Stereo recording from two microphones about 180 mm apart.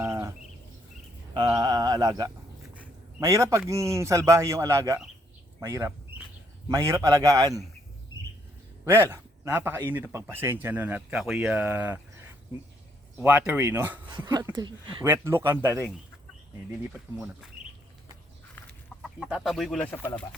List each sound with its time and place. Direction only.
0.0 s livestock: 15° right (ahead or behind)
1.3 s mantra: 20° right (ahead or behind)
3.2 s speech: 15° right (ahead or behind)
5.5 s a sound: 15° right (ahead or behind)
6.7 s a man's voice: 15° right (ahead or behind)
8.8 s speech: 10° right (ahead or behind)
13.1 s speech: 10° right (ahead or behind)
14.5 s a man's voice: 25° right (ahead or behind)
15.0 s speech: 10° right (ahead or behind)
19.0 s speech: centre (ahead or behind)